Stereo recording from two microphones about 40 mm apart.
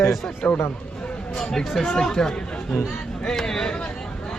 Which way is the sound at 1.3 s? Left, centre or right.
Centre.